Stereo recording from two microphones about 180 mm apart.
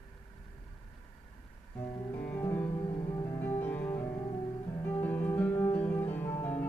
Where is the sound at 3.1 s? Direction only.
25° left (ahead or behind).